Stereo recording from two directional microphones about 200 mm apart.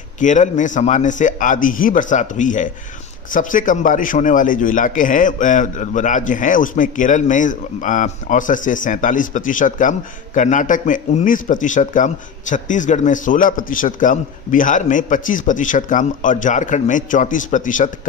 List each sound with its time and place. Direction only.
0.2 s a man's voice: 40° left (ahead or behind)